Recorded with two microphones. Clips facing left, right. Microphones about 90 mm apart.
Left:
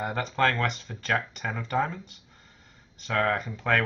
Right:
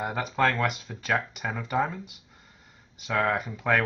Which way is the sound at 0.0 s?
5° right (ahead or behind).